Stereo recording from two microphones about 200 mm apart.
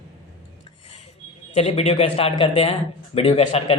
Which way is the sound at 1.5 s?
30° left (ahead or behind).